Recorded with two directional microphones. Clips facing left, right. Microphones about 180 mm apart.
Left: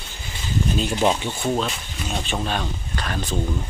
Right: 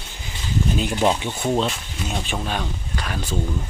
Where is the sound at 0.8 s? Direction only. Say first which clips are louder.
Even; 15° right (ahead or behind).